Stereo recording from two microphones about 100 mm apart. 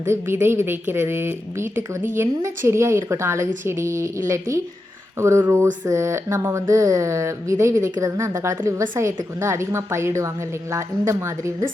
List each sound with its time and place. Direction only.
0.0 s a woman's voice: 25° right (ahead or behind)